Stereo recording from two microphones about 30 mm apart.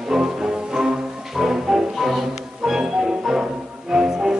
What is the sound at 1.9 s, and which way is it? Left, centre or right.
Music, centre.